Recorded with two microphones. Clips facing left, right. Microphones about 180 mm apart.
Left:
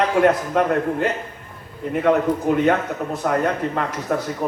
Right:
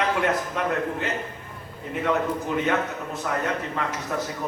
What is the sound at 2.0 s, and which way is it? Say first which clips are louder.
Speech: left 7 dB; 50° left (ahead or behind).